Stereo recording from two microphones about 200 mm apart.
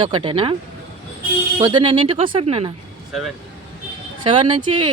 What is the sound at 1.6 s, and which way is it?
Speech, 20° right (ahead or behind).